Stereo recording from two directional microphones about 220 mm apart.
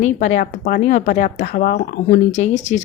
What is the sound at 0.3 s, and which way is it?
Speech, 35° left (ahead or behind).